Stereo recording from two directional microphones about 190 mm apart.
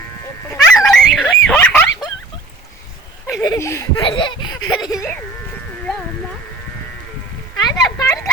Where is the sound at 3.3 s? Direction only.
15° left (ahead or behind).